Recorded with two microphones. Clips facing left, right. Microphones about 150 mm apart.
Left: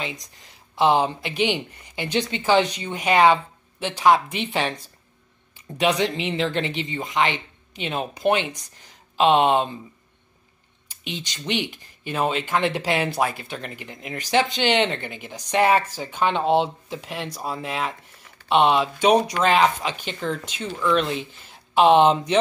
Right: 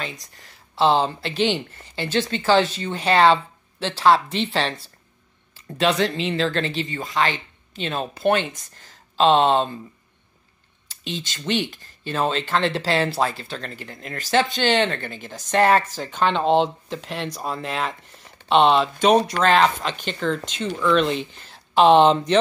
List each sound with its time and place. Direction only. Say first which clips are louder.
0.0 s speech: left 1 dB; 20° left (ahead or behind)
10.9 s speech: right 2 dB; 15° left (ahead or behind)